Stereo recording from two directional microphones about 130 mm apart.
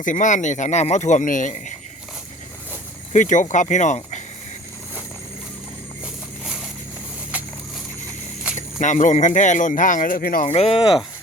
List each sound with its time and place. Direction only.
0.0 s speech: 75° left (ahead or behind)
3.1 s speech: 75° left (ahead or behind)
8.5 s speech: 70° left (ahead or behind); by 10.4 s 90° left
10.4 s speech: 50° left (ahead or behind)